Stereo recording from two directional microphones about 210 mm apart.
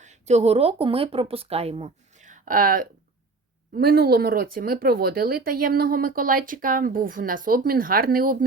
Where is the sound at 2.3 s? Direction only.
40° right (ahead or behind).